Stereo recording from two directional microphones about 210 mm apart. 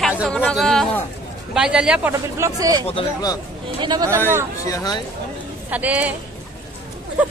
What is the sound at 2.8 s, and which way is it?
Speech, 25° left (ahead or behind).